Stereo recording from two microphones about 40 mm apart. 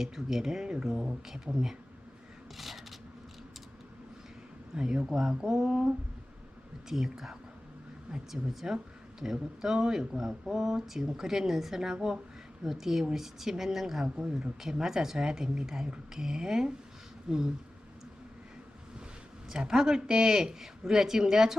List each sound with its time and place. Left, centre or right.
0.0 s speech: centre
0.6 s speech: right
2.6 s a sound: centre
4.7 s speech: right
14.2 s speech: centre
19.5 s speech: centre